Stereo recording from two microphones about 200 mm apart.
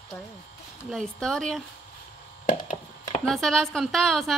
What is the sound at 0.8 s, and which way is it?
Speech, centre (ahead or behind).